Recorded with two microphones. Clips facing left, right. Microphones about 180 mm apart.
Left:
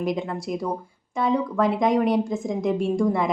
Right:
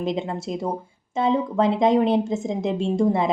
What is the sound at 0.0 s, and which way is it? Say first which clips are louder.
A woman's voice: even; 25° right (ahead or behind).